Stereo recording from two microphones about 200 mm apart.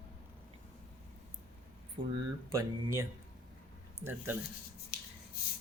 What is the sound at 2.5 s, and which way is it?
Speech, 15° right (ahead or behind).